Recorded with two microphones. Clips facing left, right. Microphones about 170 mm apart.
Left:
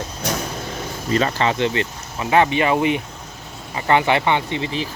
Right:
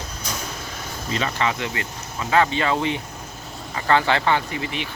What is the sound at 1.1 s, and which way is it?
Speech, 35° left (ahead or behind).